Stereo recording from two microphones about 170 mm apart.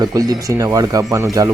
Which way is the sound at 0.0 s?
20° right (ahead or behind).